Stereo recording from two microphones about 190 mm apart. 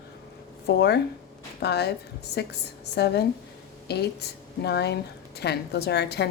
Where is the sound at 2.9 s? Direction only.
60° left (ahead or behind).